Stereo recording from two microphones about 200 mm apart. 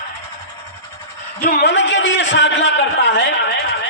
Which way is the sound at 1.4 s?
45° left (ahead or behind).